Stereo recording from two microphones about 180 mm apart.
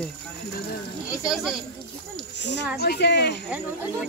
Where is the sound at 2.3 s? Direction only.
75° left (ahead or behind).